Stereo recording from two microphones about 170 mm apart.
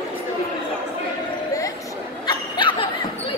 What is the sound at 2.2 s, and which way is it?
Laughter, 25° left (ahead or behind).